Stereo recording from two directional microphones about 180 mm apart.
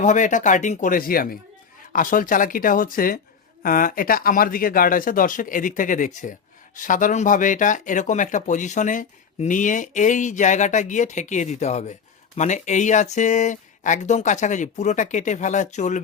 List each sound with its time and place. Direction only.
0.0 s speech: 45° left (ahead or behind)